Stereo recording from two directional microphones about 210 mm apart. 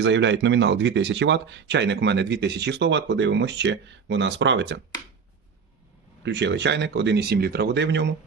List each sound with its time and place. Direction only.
0.0 s speech: 60° right (ahead or behind)
6.2 s speech: 55° right (ahead or behind)